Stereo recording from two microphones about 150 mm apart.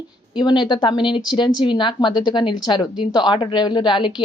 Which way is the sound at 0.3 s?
30° left (ahead or behind).